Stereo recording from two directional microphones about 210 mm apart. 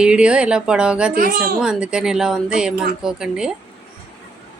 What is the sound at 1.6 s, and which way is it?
Speech, 5° right (ahead or behind).